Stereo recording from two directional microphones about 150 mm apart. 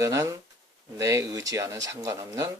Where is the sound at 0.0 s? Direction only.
20° right (ahead or behind).